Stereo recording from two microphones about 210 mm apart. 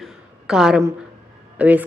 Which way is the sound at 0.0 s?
Centre (ahead or behind).